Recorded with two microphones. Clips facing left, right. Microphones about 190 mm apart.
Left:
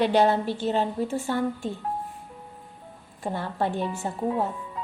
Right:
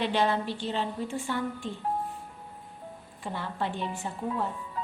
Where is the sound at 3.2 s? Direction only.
45° left (ahead or behind).